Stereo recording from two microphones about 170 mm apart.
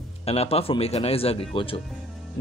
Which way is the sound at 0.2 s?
35° left (ahead or behind).